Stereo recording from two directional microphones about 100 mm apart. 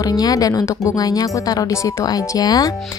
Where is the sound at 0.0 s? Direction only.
40° left (ahead or behind).